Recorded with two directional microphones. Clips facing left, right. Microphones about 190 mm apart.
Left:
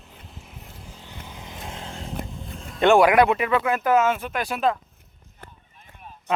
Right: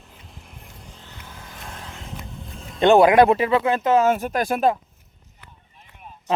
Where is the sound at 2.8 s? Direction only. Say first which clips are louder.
Right 3 dB; 25° right (ahead or behind).